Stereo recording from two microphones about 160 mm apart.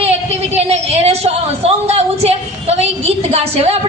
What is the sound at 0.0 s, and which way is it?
A woman's voice, 40° right (ahead or behind).